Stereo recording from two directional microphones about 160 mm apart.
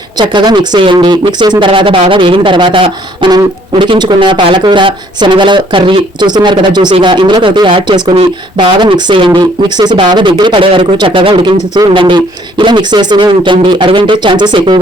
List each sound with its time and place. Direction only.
0.2 s speech: 25° right (ahead or behind)